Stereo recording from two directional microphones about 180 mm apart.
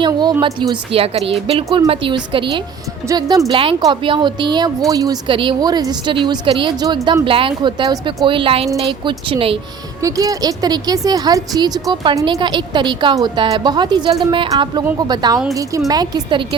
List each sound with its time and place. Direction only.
0.0 s a woman's voice: 25° right (ahead or behind)
10.0 s a woman's voice: 20° right (ahead or behind)